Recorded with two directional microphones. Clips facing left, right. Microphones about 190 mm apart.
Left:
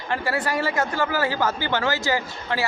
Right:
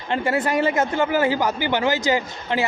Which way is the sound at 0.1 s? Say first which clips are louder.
Right 4 dB; 20° right (ahead or behind).